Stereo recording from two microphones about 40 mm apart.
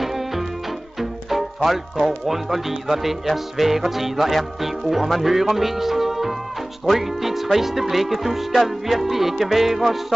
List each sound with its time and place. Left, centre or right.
0.0 s music: centre